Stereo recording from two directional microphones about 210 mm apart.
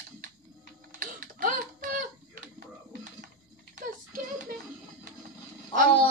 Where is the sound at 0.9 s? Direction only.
40° right (ahead or behind).